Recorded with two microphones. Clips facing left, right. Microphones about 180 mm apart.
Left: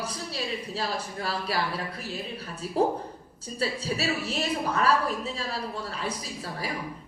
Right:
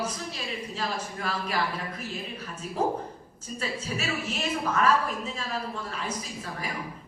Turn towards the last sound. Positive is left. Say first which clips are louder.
# left 1 dB
turn(degrees=35)  # may be behind; listen again after turning